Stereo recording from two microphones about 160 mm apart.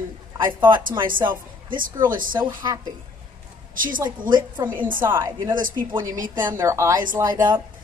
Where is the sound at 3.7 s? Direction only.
60° right (ahead or behind).